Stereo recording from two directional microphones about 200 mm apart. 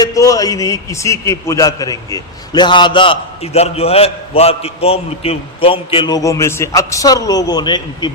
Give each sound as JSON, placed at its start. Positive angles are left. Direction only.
{"t": 0.0, "sound": "a man's voice", "side_deg": 15}